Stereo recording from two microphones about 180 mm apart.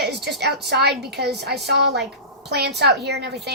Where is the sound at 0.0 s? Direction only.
65° right (ahead or behind).